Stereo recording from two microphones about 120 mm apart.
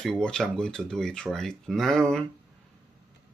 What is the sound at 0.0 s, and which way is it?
Speech, 5° left (ahead or behind).